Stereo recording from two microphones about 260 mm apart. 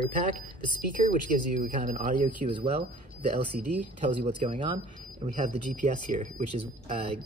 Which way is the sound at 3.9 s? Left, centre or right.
Right.